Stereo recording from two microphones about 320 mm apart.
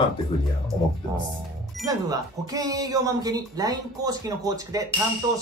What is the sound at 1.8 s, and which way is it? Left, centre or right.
Speech, centre.